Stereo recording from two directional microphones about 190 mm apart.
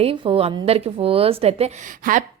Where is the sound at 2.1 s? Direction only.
45° right (ahead or behind).